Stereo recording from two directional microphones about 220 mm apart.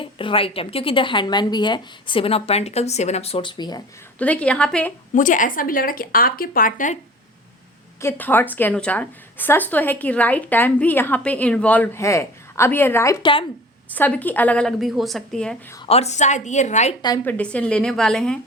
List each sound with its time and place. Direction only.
0.0 s speech: 25° left (ahead or behind)
4.2 s a woman's voice: 5° left (ahead or behind)
5.1 s speech: 35° left (ahead or behind)
8.0 s a woman's voice: 10° left (ahead or behind)
13.9 s a woman's voice: 5° left (ahead or behind)
15.7 s speech: 25° left (ahead or behind)
17.0 s a woman's voice: 15° left (ahead or behind)